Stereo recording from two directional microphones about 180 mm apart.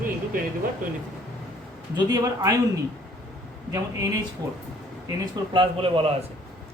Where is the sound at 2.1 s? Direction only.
20° right (ahead or behind).